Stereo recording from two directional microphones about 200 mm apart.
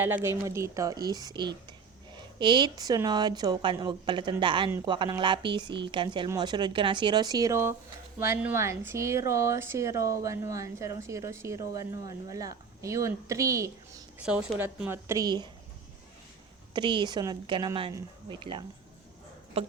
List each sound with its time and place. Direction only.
0.0 s speech: 10° right (ahead or behind)
16.7 s speech: 25° right (ahead or behind)